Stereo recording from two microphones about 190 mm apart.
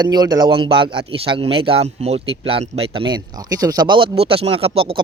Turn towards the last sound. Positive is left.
turn(degrees=-30)  # may be behind; listen again after turning